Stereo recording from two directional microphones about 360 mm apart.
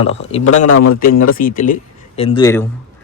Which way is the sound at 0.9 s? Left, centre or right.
Left.